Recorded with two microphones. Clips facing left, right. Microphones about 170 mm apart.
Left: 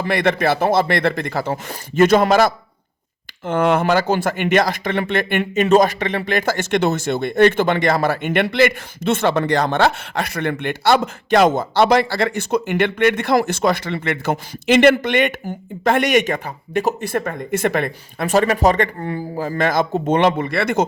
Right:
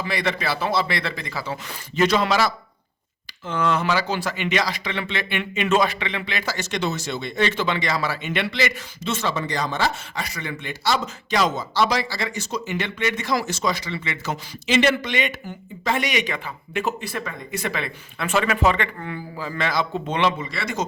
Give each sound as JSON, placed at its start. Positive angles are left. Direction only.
{"t": 0.0, "sound": "speech", "side_deg": 55}